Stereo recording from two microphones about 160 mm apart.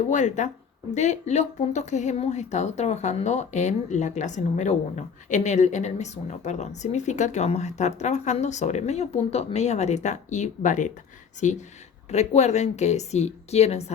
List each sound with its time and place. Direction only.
0.0 s speech: 50° left (ahead or behind)